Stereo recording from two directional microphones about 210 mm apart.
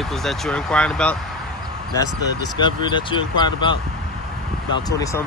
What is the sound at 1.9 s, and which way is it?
Speech, 20° left (ahead or behind).